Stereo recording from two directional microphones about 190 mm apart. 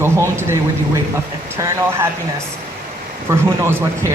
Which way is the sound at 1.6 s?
15° right (ahead or behind).